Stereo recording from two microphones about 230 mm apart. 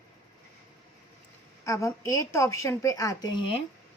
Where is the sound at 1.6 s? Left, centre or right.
Centre.